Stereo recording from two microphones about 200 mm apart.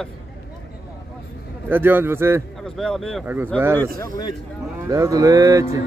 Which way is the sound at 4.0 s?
20° left (ahead or behind).